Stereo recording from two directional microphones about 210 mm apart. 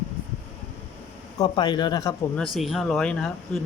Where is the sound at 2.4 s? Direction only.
Centre (ahead or behind).